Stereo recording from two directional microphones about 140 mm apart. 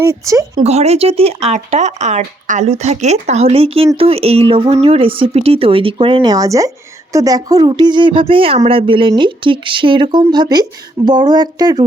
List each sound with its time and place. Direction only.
0.0 s speech: 20° right (ahead or behind)
0.6 s speech: 50° right (ahead or behind); by 11.8 s 30° right (ahead or behind)